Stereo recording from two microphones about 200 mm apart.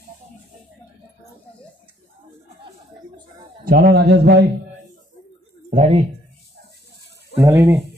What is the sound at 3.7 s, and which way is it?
Speech, 50° right (ahead or behind).